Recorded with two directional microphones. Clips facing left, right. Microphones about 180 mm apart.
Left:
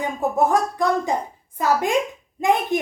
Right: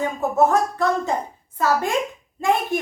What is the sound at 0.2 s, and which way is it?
A woman's voice, 15° left (ahead or behind).